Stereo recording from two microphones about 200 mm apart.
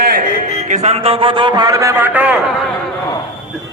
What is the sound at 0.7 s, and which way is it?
A man's voice, 35° right (ahead or behind).